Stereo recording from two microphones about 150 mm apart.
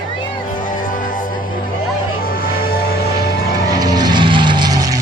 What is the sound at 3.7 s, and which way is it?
Vehicle, 25° right (ahead or behind).